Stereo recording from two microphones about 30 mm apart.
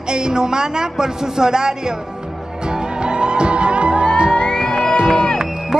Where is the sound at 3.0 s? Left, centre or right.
Right.